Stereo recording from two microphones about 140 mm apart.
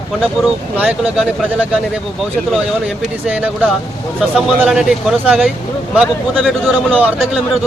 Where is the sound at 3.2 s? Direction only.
10° right (ahead or behind).